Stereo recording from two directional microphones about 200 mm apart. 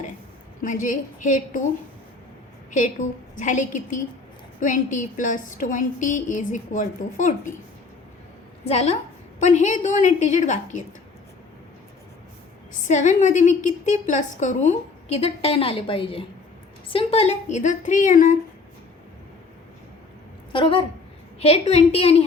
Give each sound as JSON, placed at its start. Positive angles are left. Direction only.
{"t": 0.6, "sound": "a woman's voice", "side_deg": 40}
{"t": 2.6, "sound": "a woman's voice", "side_deg": 40}
{"t": 8.6, "sound": "a woman's voice", "side_deg": 30}
{"t": 12.9, "sound": "a woman's voice", "side_deg": 40}
{"t": 20.5, "sound": "a woman's voice", "side_deg": 25}